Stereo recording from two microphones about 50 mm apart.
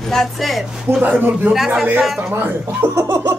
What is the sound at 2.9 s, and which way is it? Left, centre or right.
Laughter, right.